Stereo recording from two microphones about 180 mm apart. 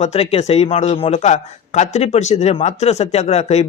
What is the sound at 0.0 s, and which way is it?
Speech, 35° left (ahead or behind).